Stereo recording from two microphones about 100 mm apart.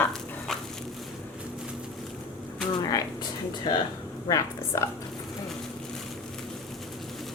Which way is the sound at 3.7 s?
45° left (ahead or behind).